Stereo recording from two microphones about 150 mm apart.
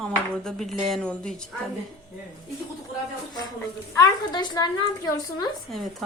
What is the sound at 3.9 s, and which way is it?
A woman's voice, 25° left (ahead or behind).